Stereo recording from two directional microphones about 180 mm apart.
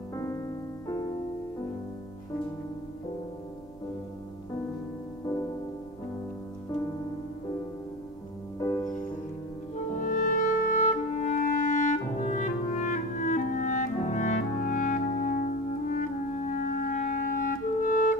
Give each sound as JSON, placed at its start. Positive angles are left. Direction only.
{"t": 0.1, "sound": "music", "side_deg": 15}
{"t": 8.5, "sound": "music", "side_deg": 15}
{"t": 9.9, "sound": "clarinet", "side_deg": 45}